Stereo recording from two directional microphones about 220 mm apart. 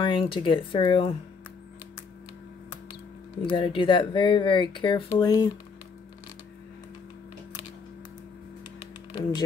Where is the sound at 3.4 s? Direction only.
20° left (ahead or behind).